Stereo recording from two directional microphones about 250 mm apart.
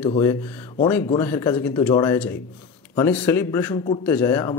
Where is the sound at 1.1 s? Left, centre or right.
Centre.